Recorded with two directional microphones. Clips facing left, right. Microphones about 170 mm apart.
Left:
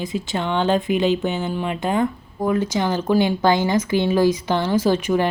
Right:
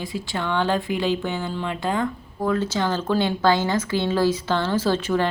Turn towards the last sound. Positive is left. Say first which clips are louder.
# left 3 dB
turn(degrees=15)  # may be behind; listen again after turning